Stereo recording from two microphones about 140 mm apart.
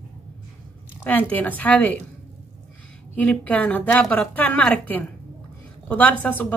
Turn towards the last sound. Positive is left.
turn(degrees=10)  # may be behind; listen again after turning